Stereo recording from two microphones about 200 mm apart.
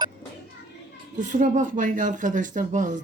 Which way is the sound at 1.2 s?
40° right (ahead or behind).